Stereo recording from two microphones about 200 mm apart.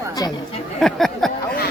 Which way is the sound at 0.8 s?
Centre (ahead or behind).